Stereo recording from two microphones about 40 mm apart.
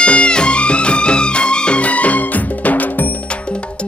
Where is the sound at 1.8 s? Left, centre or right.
Left.